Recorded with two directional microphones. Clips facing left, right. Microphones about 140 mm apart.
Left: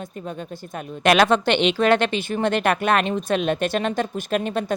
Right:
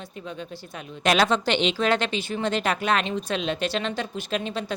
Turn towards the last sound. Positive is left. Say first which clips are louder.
# left 5 dB
turn(degrees=50)  # may be behind; listen again after turning